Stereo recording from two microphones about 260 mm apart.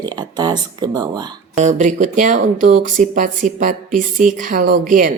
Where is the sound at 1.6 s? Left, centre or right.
Right.